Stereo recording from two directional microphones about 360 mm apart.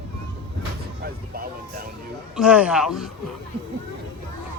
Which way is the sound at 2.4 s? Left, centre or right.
Centre.